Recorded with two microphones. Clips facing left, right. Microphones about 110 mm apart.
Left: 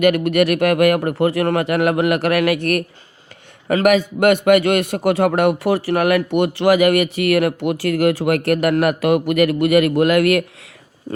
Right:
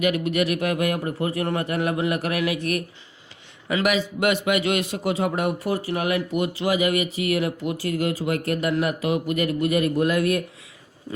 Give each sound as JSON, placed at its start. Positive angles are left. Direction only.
{"t": 0.0, "sound": "a man's voice", "side_deg": 65}
{"t": 3.7, "sound": "a man's voice", "side_deg": 50}